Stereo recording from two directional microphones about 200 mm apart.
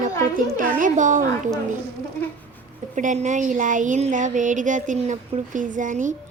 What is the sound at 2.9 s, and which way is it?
Speech, 35° right (ahead or behind).